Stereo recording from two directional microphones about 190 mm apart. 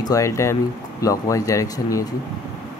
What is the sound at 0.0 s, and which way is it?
Speech, 15° left (ahead or behind).